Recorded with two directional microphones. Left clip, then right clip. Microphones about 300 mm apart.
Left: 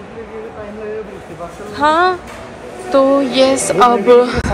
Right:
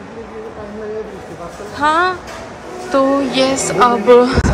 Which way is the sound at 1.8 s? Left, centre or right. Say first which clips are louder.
Left 2 dB; centre.